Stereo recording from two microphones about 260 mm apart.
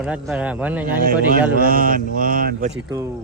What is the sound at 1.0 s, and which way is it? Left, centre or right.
Speech, right.